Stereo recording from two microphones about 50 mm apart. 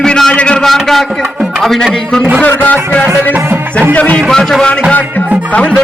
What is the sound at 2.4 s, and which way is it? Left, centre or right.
Music, left.